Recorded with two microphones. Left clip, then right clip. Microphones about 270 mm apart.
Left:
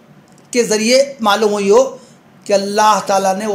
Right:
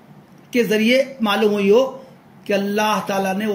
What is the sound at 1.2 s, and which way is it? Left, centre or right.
Speech, left.